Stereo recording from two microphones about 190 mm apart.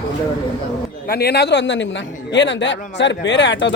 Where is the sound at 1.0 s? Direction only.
55° left (ahead or behind).